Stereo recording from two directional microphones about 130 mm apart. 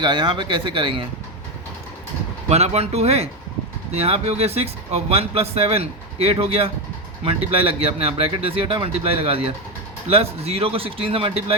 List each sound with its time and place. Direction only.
0.0 s speech: 40° right (ahead or behind)
2.5 s speech: 55° right (ahead or behind)